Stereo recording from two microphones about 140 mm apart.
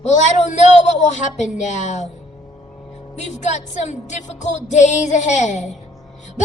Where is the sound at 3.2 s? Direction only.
60° left (ahead or behind).